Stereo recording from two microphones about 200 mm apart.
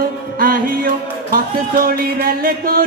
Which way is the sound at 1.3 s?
45° right (ahead or behind).